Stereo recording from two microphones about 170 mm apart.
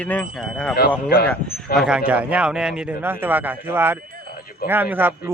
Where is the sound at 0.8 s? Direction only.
65° left (ahead or behind).